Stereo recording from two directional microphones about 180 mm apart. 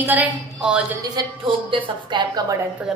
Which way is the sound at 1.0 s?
25° right (ahead or behind).